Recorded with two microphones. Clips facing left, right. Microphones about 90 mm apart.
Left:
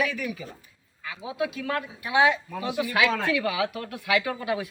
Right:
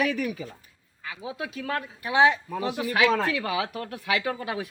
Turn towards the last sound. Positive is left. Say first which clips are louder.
# left 2 dB
turn(degrees=-35)  # may be behind; listen again after turning